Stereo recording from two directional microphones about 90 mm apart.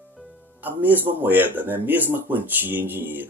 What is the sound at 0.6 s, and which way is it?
Speech, 20° right (ahead or behind).